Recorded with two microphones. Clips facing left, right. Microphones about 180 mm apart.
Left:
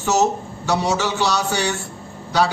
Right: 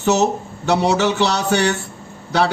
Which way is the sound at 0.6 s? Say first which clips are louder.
Right 4 dB; 65° right (ahead or behind).